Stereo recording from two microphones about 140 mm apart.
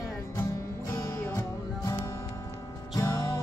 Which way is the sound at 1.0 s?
20° left (ahead or behind).